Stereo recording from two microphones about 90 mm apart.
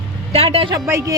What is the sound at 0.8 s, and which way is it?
Speech, 35° right (ahead or behind).